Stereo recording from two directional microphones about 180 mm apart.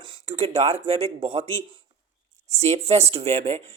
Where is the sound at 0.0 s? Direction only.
30° right (ahead or behind).